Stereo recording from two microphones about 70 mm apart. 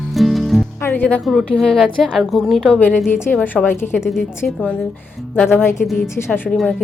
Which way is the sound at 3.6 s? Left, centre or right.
Left.